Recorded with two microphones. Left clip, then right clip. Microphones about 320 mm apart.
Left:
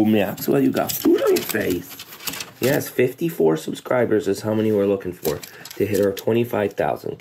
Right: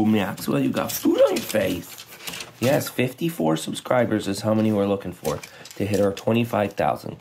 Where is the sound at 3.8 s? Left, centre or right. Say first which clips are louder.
Left 3 dB; right.